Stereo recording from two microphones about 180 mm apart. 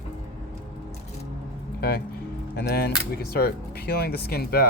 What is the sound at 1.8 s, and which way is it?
Speech, 60° left (ahead or behind).